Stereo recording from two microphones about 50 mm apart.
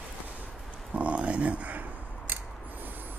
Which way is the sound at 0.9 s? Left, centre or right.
Right.